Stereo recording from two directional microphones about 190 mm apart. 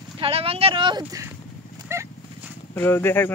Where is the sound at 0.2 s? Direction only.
30° right (ahead or behind).